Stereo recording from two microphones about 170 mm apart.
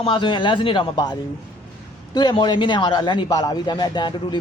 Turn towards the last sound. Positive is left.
turn(degrees=25)  # may be behind; listen again after turning